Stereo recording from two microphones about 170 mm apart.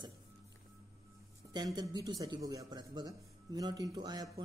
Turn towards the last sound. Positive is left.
turn(degrees=-25)  # may be behind; listen again after turning